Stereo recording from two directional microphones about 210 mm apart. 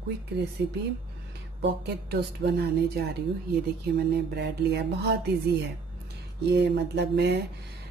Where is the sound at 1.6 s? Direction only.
55° right (ahead or behind).